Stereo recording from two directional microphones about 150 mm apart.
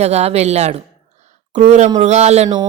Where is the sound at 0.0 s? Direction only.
45° right (ahead or behind).